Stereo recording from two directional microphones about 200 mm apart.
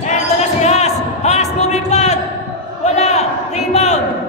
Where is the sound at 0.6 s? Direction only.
35° left (ahead or behind).